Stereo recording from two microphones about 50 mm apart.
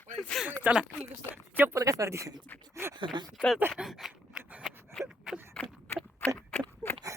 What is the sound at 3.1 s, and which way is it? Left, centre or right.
Speech, centre.